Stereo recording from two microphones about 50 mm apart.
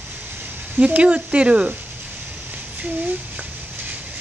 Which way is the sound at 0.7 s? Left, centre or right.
Right.